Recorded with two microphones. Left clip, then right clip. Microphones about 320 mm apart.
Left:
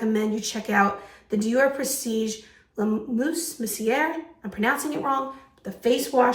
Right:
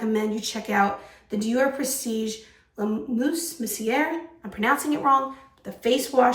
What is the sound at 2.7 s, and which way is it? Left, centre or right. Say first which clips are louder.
Speech: left 1 dB; centre.